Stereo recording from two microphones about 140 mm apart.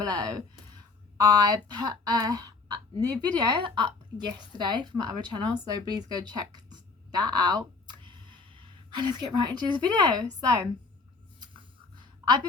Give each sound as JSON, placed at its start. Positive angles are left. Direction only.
{"t": 0.0, "sound": "speech", "side_deg": -30}
{"t": 8.0, "sound": "a sound", "side_deg": -35}
{"t": 12.2, "sound": "a woman's voice", "side_deg": -30}